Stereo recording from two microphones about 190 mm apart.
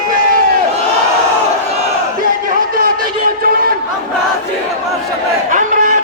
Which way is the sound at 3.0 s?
50° right (ahead or behind).